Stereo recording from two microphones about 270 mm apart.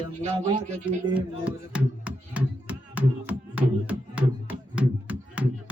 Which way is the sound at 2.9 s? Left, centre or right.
Centre.